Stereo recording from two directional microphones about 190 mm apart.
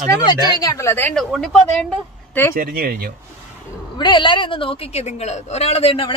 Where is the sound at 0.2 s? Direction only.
20° left (ahead or behind); by 1.9 s 5° left (ahead or behind).